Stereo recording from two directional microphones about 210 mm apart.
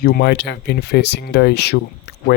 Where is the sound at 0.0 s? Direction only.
50° left (ahead or behind).